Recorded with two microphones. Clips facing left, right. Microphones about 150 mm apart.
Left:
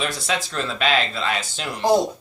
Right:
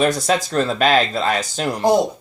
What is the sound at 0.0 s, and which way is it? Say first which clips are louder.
Speech: right 8 dB; 45° right (ahead or behind).